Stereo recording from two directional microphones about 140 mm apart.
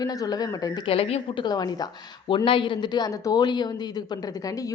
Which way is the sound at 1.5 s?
30° left (ahead or behind).